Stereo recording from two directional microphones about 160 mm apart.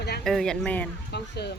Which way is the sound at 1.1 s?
90° left.